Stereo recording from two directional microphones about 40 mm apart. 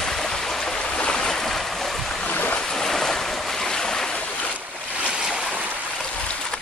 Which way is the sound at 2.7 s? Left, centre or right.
Centre.